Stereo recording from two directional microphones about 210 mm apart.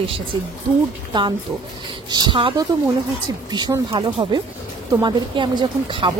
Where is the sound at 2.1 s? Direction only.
20° right (ahead or behind).